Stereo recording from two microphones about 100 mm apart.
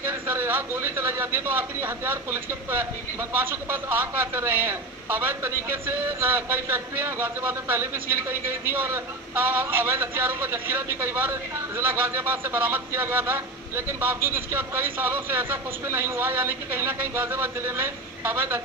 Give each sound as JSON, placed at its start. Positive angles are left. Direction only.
{"t": 0.0, "sound": "a man's voice", "side_deg": -25}